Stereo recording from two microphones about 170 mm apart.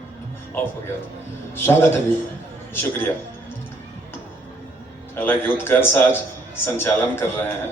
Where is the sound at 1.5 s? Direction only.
15° left (ahead or behind).